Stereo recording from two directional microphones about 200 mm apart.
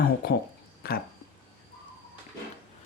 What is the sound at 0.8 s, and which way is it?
Speech, 50° left (ahead or behind).